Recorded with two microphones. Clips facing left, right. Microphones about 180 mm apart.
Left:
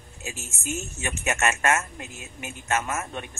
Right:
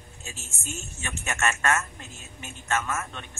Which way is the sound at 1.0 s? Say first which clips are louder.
Left 3 dB; 15° left (ahead or behind).